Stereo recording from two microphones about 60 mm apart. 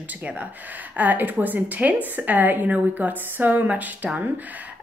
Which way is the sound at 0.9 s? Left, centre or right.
Right.